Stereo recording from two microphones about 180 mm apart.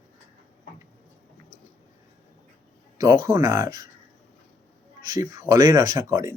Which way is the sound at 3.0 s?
20° right (ahead or behind).